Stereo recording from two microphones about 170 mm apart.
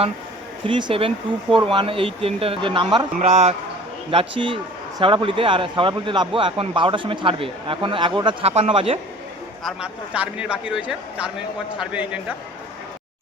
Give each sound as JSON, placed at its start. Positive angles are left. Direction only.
{"t": 0.7, "sound": "a man's voice", "side_deg": -30}
{"t": 3.2, "sound": "a man's voice", "side_deg": -40}
{"t": 4.1, "sound": "a man's voice", "side_deg": -30}
{"t": 9.6, "sound": "speech", "side_deg": -5}